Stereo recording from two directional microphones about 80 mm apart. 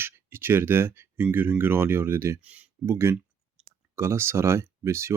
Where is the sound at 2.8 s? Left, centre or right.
Right.